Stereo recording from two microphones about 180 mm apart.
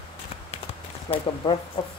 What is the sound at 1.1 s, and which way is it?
Speech, 25° left (ahead or behind).